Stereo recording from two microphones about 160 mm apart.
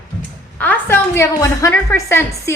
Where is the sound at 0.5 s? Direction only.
10° left (ahead or behind).